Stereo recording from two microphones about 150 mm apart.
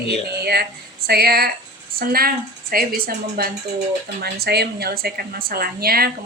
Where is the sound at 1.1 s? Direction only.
90° right.